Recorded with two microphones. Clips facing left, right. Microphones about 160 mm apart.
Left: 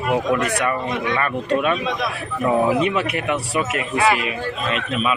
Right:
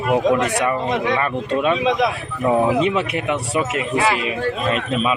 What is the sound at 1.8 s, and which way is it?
Speech, 90° right.